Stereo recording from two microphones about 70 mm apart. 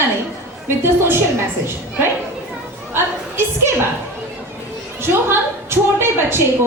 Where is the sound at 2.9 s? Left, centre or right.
Right.